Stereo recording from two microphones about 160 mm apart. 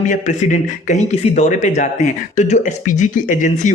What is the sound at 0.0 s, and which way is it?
Speech, 50° left (ahead or behind).